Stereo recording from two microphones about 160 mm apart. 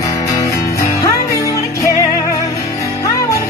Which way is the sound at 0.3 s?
20° left (ahead or behind).